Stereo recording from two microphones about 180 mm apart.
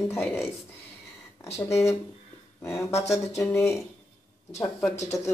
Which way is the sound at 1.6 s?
15° left (ahead or behind).